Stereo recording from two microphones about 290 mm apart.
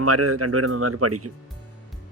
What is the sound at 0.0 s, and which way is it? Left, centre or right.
Speech, right.